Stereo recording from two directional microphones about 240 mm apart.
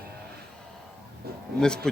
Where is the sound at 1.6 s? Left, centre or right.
Centre.